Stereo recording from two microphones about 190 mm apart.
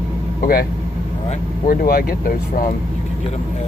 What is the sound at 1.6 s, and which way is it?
Speech, 50° left (ahead or behind).